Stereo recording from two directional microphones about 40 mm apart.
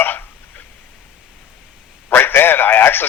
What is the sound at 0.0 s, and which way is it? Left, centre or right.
Hiccup, left.